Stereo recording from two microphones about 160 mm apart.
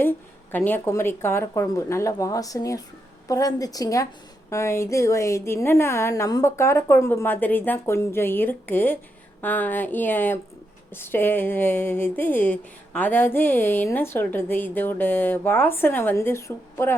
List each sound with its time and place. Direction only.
0.5 s a woman's voice: 10° left (ahead or behind)